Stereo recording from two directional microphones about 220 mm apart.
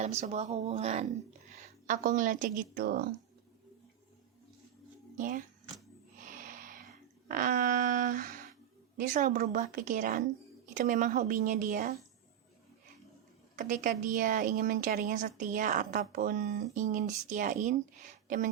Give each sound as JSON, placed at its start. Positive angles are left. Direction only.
{"t": 0.0, "sound": "a woman's voice", "side_deg": -30}
{"t": 5.1, "sound": "speech", "side_deg": -35}
{"t": 6.2, "sound": "a sound", "side_deg": -40}
{"t": 9.0, "sound": "a woman's voice", "side_deg": -35}
{"t": 13.6, "sound": "a woman's voice", "side_deg": -35}